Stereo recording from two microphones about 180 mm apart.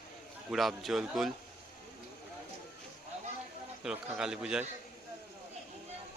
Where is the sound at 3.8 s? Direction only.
5° right (ahead or behind).